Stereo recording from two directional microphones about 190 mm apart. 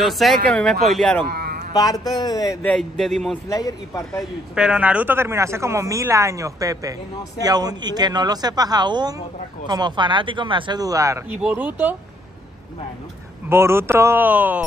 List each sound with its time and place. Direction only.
0.0 s speech: centre (ahead or behind)
1.2 s a sound: 55° right (ahead or behind)
1.7 s a man's voice: 20° left (ahead or behind)
2.6 s speech: 5° left (ahead or behind)
3.4 s speech: 20° left (ahead or behind)
4.1 s speech: centre (ahead or behind)
13.5 s speech: 15° right (ahead or behind)